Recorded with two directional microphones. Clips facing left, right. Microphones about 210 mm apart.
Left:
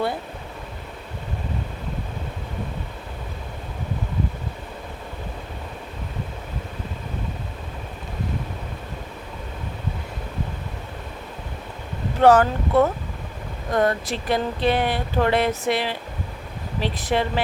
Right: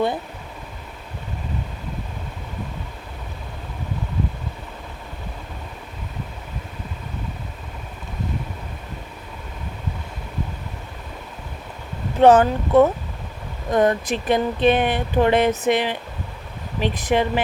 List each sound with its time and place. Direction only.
12.2 s speech: 20° right (ahead or behind)